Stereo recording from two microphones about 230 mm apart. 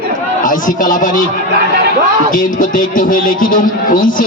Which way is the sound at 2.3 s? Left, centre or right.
Left.